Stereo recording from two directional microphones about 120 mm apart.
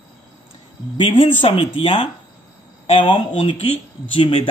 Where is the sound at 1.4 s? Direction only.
50° left (ahead or behind).